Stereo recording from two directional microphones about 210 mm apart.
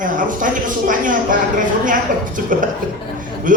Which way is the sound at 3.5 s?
40° right (ahead or behind).